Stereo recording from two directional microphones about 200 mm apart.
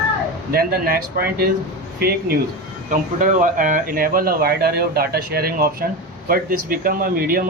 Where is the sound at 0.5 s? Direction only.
50° right (ahead or behind).